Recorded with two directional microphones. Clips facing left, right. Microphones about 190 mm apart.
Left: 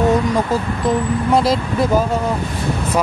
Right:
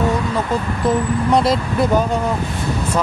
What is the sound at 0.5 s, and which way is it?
Speech, 10° left (ahead or behind).